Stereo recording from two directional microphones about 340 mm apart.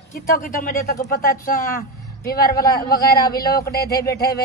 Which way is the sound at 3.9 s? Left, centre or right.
Centre.